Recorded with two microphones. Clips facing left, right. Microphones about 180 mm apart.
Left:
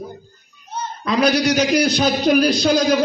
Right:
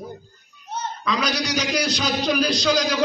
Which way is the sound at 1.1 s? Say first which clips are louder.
Left 8 dB; 50° left (ahead or behind).